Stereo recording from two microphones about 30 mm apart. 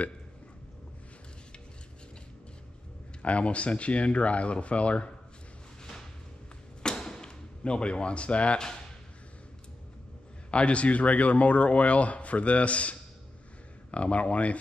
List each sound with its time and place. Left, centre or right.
3.2 s a man's voice: left
6.8 s a sound: left
10.5 s a man's voice: left